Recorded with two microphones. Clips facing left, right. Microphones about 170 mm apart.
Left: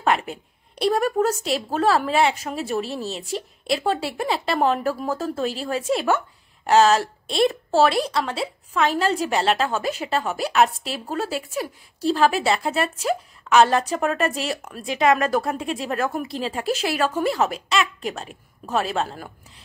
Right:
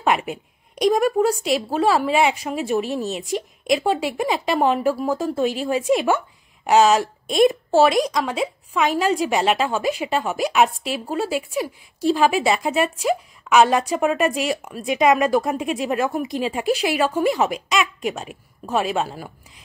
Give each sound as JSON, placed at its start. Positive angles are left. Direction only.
{"t": 0.0, "sound": "a woman's voice", "side_deg": -10}
{"t": 2.6, "sound": "speech", "side_deg": 35}
{"t": 3.6, "sound": "a woman's voice", "side_deg": -10}